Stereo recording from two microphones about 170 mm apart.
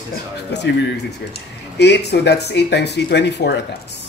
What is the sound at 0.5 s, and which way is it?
Speech, 90° left.